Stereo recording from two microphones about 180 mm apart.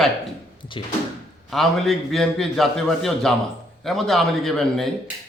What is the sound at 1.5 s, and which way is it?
A man's voice, centre (ahead or behind).